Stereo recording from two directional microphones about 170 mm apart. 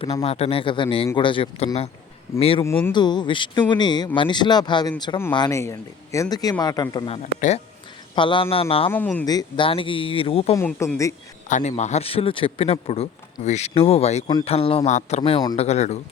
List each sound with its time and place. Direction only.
0.0 s speech: 40° left (ahead or behind)
2.6 s speech: 15° left (ahead or behind)
2.9 s speech: 25° left (ahead or behind)
8.9 s speech: 10° left (ahead or behind)
9.2 s speech: 20° left (ahead or behind)
10.8 s speech: 15° left (ahead or behind)
11.4 s speech: 45° left (ahead or behind)